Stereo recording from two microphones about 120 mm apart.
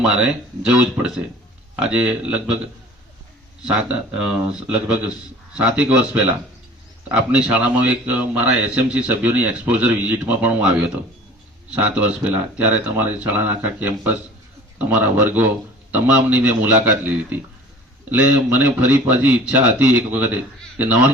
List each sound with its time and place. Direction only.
0.0 s a man's voice: 10° right (ahead or behind)
3.6 s a man's voice: 10° right (ahead or behind)
7.1 s a man's voice: 10° right (ahead or behind)